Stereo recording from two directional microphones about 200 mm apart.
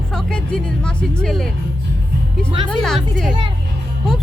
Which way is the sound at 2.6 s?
5° left (ahead or behind).